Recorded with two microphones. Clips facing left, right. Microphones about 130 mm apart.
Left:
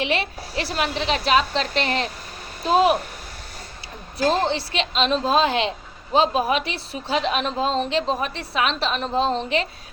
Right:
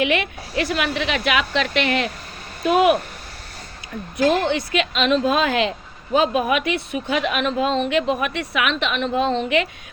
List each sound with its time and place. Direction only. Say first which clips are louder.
0.0 s speech: right 3 dB; 30° left (ahead or behind)
4.3 s speech: right 1 dB; 30° left (ahead or behind)